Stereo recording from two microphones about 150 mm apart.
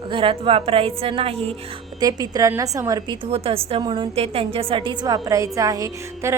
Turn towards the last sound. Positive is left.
turn(degrees=-20)  # may be behind; listen again after turning